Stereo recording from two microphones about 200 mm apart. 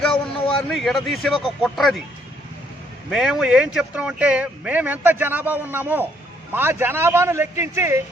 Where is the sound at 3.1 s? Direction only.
Centre (ahead or behind).